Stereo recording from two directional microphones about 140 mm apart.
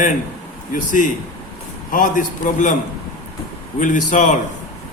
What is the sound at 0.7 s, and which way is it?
A man's voice, 75° left (ahead or behind).